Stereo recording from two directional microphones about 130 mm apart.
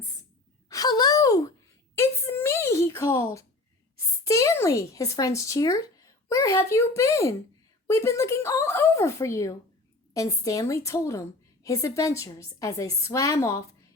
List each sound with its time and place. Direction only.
0.7 s sigh: 30° left (ahead or behind)
2.0 s a sound: 20° left (ahead or behind)
3.9 s a woman's voice: 25° left (ahead or behind)